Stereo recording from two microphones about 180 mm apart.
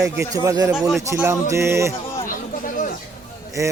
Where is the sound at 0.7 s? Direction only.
Centre (ahead or behind).